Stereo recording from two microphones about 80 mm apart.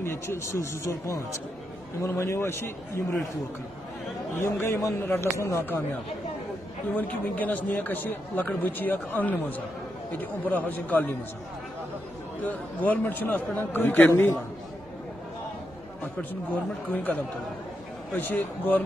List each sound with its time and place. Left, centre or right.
0.0 s speech: left
4.4 s speech: left
7.0 s speech: left
12.4 s speech: left
16.9 s speech: left